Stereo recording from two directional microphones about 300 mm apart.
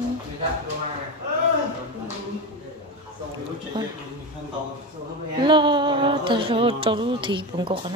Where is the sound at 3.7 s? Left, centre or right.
Centre.